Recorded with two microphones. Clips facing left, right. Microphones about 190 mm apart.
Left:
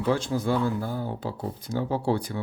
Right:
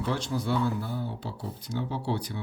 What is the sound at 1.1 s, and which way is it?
Speech, 50° left (ahead or behind).